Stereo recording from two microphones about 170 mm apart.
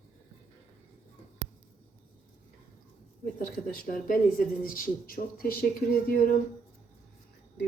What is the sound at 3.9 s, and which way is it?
Speech, 55° left (ahead or behind).